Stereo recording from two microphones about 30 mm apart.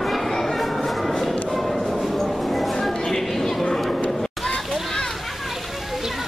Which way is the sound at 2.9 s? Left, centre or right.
Centre.